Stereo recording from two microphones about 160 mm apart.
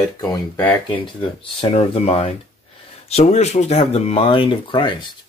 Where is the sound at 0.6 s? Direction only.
10° left (ahead or behind).